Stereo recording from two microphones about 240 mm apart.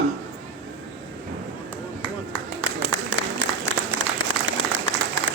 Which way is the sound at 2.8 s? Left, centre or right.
Right.